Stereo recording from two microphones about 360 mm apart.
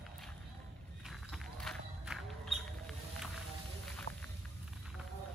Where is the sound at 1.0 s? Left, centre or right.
Centre.